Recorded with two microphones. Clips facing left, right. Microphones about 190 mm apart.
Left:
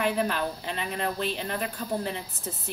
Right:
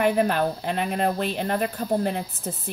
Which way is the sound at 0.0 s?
50° right (ahead or behind).